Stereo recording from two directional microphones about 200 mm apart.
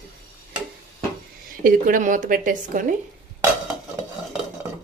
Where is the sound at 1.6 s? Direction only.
40° right (ahead or behind).